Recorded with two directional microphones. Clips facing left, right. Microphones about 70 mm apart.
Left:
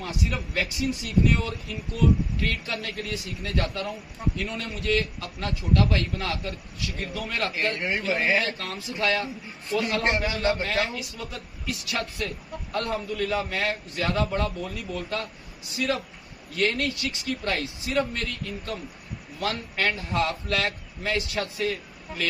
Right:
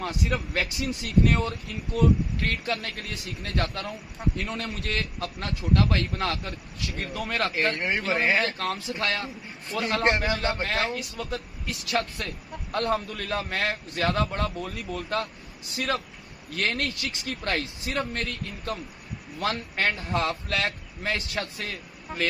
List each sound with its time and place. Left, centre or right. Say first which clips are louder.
0.0 s a man's voice: right 2 dB; right
7.8 s a man's voice: even; right
9.2 s a man's voice: left 1 dB; right